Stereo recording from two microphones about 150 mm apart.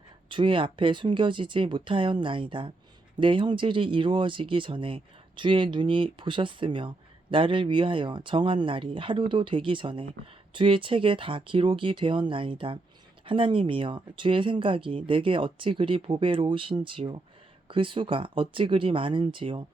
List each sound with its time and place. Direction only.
0.3 s speech: 35° right (ahead or behind)